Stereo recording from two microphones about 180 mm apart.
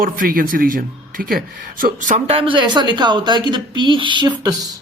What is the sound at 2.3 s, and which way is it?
Speech, 30° right (ahead or behind).